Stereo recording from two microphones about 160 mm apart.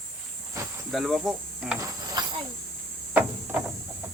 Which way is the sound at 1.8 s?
25° right (ahead or behind).